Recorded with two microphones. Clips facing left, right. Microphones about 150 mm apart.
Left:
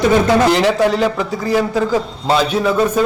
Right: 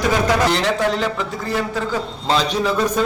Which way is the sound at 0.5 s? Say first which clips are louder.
Left 5 dB; 5° left (ahead or behind).